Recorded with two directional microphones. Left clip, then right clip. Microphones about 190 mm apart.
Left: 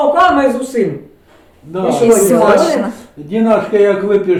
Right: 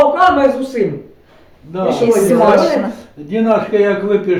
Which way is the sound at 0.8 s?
30° left (ahead or behind).